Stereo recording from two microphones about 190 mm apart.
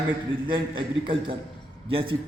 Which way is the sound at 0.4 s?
25° right (ahead or behind).